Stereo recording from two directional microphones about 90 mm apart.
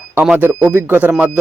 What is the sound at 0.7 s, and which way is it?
Speech, 20° right (ahead or behind).